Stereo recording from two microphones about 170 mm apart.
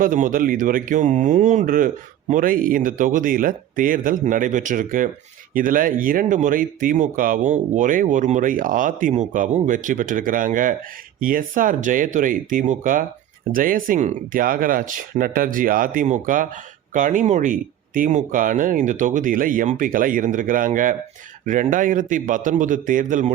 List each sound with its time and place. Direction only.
0.0 s speech: 50° right (ahead or behind)